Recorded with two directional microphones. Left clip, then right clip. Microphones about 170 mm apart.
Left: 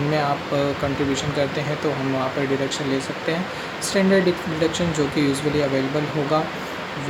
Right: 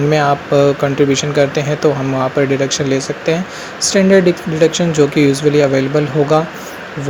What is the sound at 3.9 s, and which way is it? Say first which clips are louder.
Speech: right 8 dB; 40° right (ahead or behind).